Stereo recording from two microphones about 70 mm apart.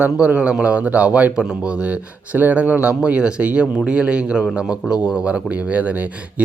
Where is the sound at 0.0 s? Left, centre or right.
Centre.